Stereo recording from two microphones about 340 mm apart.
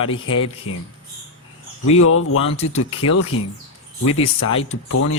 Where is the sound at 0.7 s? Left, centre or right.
Left.